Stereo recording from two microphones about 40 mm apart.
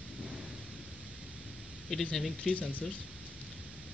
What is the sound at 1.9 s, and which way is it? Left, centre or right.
Speech, centre.